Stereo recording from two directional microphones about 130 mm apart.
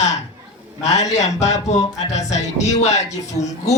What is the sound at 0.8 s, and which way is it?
Speech, 60° left (ahead or behind).